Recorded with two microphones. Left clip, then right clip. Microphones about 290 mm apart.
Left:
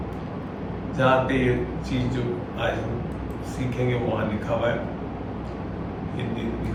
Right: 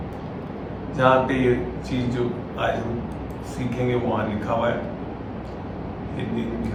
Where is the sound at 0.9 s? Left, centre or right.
Centre.